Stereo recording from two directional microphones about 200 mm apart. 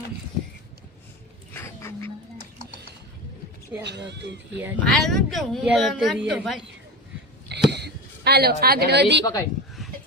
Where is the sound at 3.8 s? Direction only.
60° right (ahead or behind).